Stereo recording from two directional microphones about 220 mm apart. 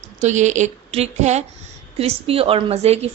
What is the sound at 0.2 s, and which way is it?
A woman's voice, 30° right (ahead or behind).